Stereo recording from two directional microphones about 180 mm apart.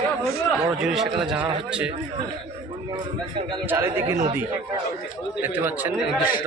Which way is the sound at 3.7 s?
15° right (ahead or behind).